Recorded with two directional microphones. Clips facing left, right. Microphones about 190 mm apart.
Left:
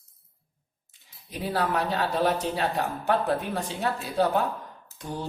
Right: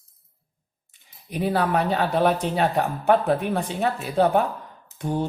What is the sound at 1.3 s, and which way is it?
Speech, 60° right (ahead or behind).